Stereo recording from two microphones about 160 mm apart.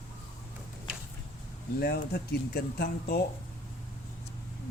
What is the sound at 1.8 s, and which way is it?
Speech, 80° left.